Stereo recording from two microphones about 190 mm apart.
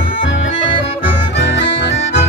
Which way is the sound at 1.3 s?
70° left (ahead or behind).